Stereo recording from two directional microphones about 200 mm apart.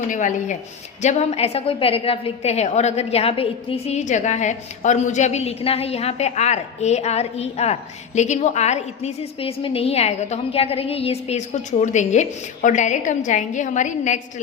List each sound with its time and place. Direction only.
0.1 s a woman's voice: 40° left (ahead or behind)